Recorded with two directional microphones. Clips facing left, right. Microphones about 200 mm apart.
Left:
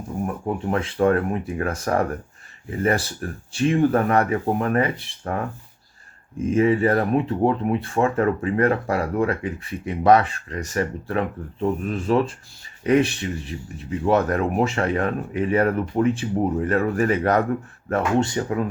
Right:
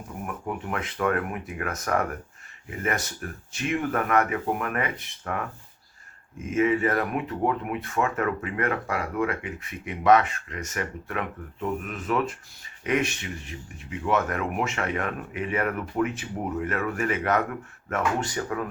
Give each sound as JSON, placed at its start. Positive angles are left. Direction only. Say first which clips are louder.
{"t": 0.3, "sound": "speech", "louder": "left 5 dB", "side_deg": 30}